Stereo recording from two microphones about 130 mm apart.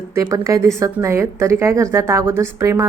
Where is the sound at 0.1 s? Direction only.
25° right (ahead or behind).